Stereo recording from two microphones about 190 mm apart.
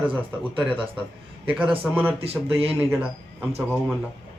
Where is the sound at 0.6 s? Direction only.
5° right (ahead or behind).